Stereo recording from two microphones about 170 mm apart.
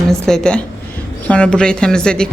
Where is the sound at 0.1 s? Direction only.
5° left (ahead or behind).